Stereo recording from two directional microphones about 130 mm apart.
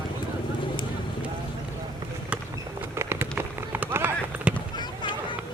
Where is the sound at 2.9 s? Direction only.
20° right (ahead or behind).